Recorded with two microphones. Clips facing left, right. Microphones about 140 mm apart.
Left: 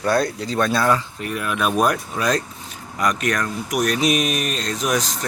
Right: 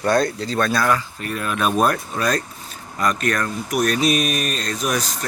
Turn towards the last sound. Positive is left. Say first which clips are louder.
# left 1 dB
turn(degrees=20)  # may be behind; listen again after turning